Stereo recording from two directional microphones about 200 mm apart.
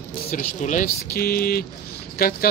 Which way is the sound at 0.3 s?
40° left (ahead or behind).